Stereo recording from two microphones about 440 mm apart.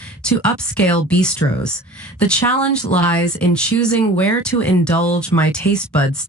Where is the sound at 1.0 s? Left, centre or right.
Centre.